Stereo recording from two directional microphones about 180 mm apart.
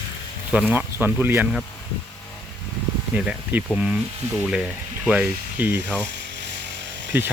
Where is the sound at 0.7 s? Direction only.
10° right (ahead or behind).